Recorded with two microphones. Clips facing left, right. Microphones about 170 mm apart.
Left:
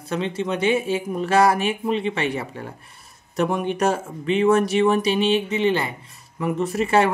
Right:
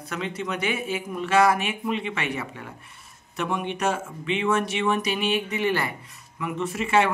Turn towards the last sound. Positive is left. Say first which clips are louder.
# left 3 dB
turn(degrees=40)  # may be behind; listen again after turning